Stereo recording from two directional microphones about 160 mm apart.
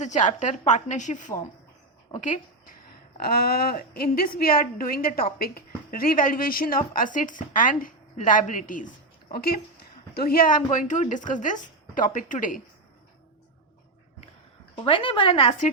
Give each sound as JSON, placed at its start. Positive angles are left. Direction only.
{"t": 0.0, "sound": "a woman's voice", "side_deg": 50}
{"t": 2.1, "sound": "speech", "side_deg": 40}
{"t": 3.2, "sound": "a woman's voice", "side_deg": 75}
{"t": 9.3, "sound": "a woman's voice", "side_deg": 70}
{"t": 14.8, "sound": "speech", "side_deg": 30}